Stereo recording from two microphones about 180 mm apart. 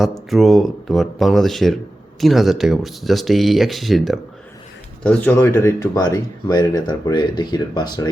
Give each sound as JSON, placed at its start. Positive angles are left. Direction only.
{"t": 0.3, "sound": "speech", "side_deg": 0}